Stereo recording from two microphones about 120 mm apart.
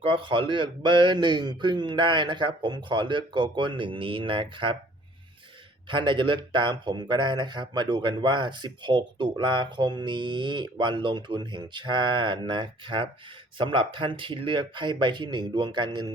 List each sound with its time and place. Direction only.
0.0 s a man's voice: 45° right (ahead or behind)
5.9 s a man's voice: 40° right (ahead or behind)